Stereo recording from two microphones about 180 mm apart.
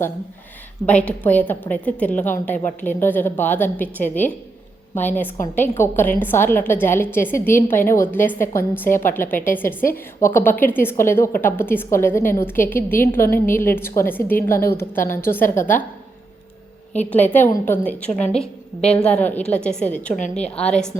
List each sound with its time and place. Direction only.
0.9 s a woman's voice: 10° left (ahead or behind)
15.5 s a woman's voice: 45° left (ahead or behind)
17.1 s a woman's voice: 10° left (ahead or behind)